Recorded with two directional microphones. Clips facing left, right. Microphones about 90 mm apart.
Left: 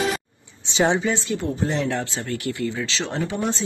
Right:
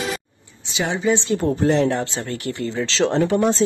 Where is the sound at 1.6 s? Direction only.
60° right (ahead or behind).